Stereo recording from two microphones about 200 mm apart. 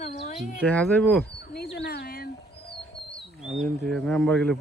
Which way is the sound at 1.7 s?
55° left (ahead or behind).